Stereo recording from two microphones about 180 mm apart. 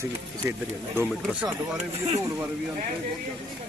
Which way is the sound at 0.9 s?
15° right (ahead or behind).